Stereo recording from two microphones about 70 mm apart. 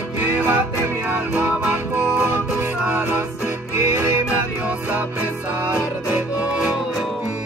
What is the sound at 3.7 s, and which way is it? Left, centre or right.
Music, right.